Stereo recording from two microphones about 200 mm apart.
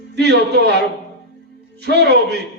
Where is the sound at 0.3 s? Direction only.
55° right (ahead or behind).